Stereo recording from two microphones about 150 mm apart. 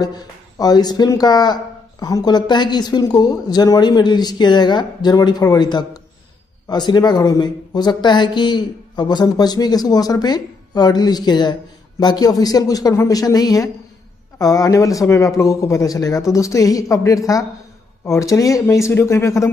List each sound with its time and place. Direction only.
0.0 s speech: 25° left (ahead or behind)